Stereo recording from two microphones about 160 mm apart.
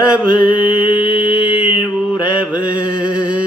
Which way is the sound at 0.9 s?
30° left (ahead or behind).